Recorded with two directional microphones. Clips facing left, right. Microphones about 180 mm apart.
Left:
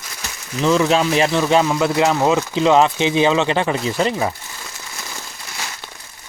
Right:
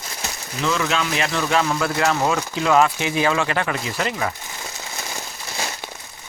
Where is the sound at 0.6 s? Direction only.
35° left (ahead or behind).